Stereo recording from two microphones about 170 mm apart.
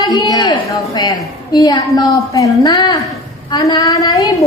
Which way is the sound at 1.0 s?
25° left (ahead or behind).